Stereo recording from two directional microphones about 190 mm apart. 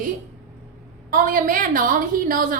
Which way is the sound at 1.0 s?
45° right (ahead or behind).